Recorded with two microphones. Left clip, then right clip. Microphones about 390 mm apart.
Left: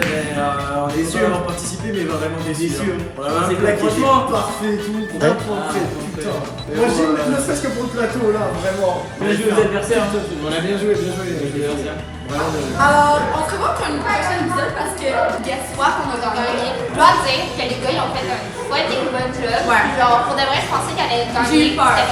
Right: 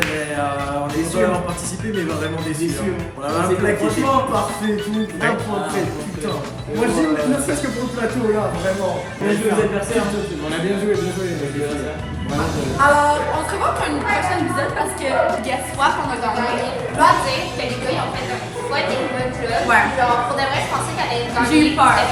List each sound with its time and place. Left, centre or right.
3.2 s a woman's voice: centre
6.7 s a woman's voice: centre
12.4 s a woman's voice: centre